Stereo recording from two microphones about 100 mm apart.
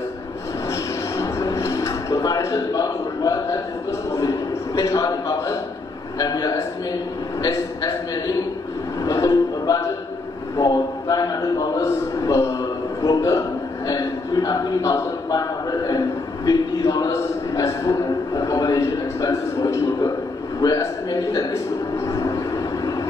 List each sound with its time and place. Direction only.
0.7 s a sound: 35° left (ahead or behind)
4.1 s a man's voice: 35° left (ahead or behind)
9.0 s music: 35° left (ahead or behind)
10.6 s a man's voice: 40° left (ahead or behind)
21.9 s vehicle: 30° left (ahead or behind)